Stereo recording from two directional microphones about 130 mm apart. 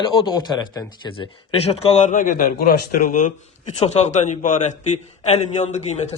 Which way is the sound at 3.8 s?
60° left (ahead or behind).